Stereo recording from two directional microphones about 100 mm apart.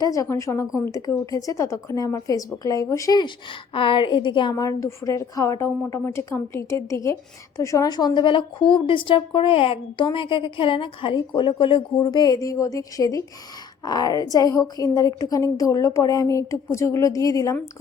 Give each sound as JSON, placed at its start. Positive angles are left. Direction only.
{"t": 0.0, "sound": "a woman's voice", "side_deg": 35}
{"t": 3.8, "sound": "a woman's voice", "side_deg": 55}
{"t": 4.5, "sound": "a woman's voice", "side_deg": 30}